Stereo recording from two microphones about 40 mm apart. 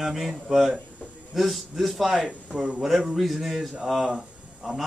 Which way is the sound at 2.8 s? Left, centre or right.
Centre.